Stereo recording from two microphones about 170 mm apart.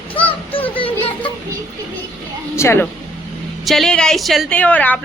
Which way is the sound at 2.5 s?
15° left (ahead or behind).